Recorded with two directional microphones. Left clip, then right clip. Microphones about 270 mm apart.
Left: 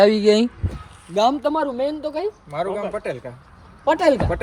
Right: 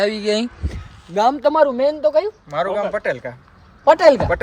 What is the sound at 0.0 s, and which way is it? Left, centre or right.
Speech, centre.